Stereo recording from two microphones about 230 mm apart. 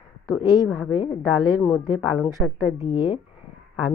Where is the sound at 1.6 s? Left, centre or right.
Centre.